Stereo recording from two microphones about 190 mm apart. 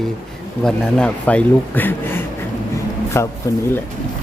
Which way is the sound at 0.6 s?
5° left (ahead or behind).